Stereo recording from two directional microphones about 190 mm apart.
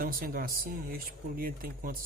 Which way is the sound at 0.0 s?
50° right (ahead or behind).